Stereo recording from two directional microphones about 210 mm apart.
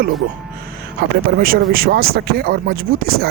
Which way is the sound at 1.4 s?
45° right (ahead or behind).